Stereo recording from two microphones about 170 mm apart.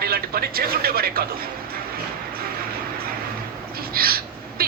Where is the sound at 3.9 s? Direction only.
60° right (ahead or behind).